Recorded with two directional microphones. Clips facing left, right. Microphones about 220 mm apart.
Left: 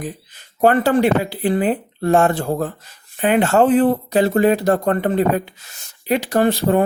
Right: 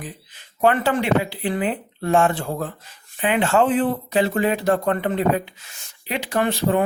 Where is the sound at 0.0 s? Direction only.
40° left (ahead or behind).